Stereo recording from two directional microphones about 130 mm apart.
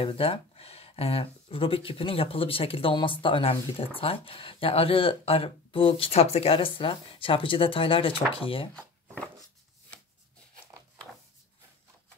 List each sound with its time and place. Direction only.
0.0 s speech: 45° left (ahead or behind)